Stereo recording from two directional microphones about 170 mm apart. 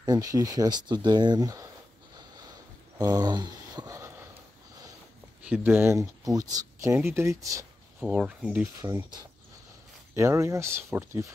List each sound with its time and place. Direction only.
0.0 s speech: 20° right (ahead or behind)
3.0 s speech: 25° right (ahead or behind)
5.5 s speech: 10° right (ahead or behind)
8.0 s speech: 5° right (ahead or behind)
8.8 s speech: 15° right (ahead or behind)